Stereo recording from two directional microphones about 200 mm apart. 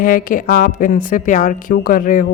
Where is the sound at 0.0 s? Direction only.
45° left (ahead or behind).